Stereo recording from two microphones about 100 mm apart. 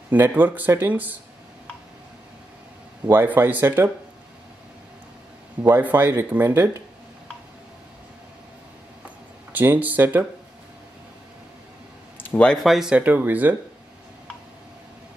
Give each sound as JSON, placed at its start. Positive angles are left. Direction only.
{"t": 0.1, "sound": "speech", "side_deg": -15}
{"t": 3.1, "sound": "speech", "side_deg": -20}
{"t": 5.6, "sound": "speech", "side_deg": -20}
{"t": 9.5, "sound": "speech", "side_deg": -20}
{"t": 12.4, "sound": "speech", "side_deg": 5}
{"t": 12.9, "sound": "speech", "side_deg": -15}